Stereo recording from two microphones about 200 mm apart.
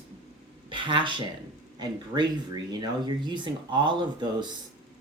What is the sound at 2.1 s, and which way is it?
Speech, 20° right (ahead or behind).